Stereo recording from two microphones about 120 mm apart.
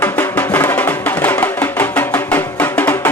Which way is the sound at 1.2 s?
15° left (ahead or behind).